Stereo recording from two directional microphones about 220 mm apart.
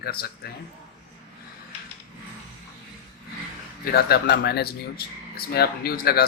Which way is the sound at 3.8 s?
45° left (ahead or behind).